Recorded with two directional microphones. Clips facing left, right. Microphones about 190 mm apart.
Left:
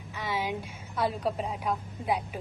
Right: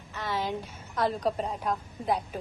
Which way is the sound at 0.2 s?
10° left (ahead or behind).